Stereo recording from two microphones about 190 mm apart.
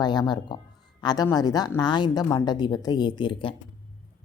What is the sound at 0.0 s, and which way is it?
A woman's voice, 25° left (ahead or behind).